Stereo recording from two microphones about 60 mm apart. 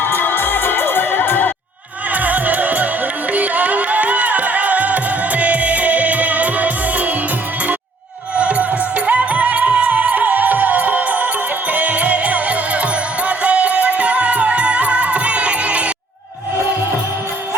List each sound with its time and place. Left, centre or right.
0.0 s music: left
2.1 s music: right
8.4 s music: right